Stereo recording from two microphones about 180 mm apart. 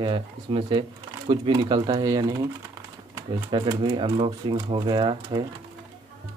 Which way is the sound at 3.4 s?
25° right (ahead or behind).